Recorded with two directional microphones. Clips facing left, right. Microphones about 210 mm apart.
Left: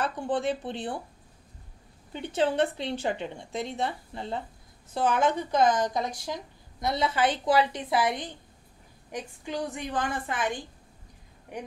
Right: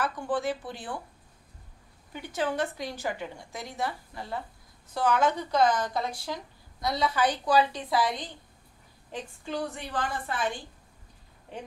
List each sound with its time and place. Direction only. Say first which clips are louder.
0.0 s a woman's voice: left 1 dB; 25° left (ahead or behind)
2.1 s a woman's voice: left 4 dB; 25° left (ahead or behind)